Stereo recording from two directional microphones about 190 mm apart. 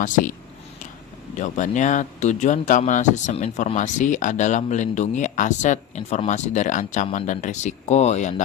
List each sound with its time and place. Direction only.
0.0 s speech: 45° left (ahead or behind)
1.4 s speech: 40° left (ahead or behind)